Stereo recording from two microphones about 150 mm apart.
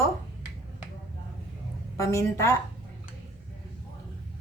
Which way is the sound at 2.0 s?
20° left (ahead or behind).